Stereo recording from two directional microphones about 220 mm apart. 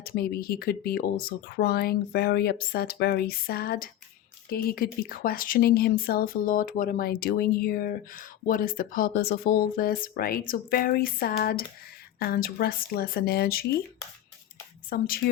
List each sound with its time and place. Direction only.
0.0 s speech: 45° left (ahead or behind)
14.8 s speech: 40° left (ahead or behind)